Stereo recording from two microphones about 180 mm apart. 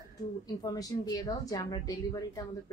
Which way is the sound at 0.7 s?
20° left (ahead or behind).